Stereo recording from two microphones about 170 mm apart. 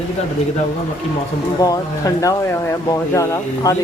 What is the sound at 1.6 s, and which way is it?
Speech, 20° left (ahead or behind).